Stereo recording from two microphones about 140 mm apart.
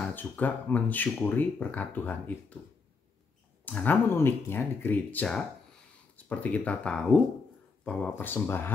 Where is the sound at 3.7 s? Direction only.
10° left (ahead or behind).